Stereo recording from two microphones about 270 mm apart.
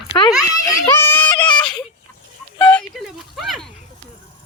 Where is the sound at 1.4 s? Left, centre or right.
Centre.